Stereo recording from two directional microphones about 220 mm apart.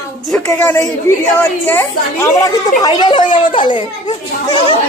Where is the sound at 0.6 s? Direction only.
5° left (ahead or behind).